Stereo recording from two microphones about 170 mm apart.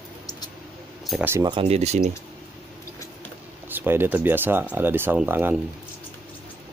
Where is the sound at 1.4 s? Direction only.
30° right (ahead or behind).